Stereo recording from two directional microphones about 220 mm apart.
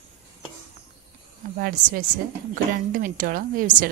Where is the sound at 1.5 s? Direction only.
45° right (ahead or behind).